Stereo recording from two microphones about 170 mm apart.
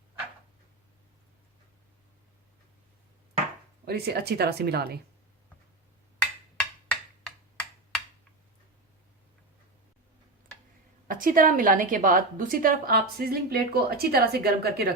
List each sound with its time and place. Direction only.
3.8 s speech: 70° right (ahead or behind)
6.8 s finger snapping: 5° left (ahead or behind)
11.1 s a woman's voice: 55° right (ahead or behind)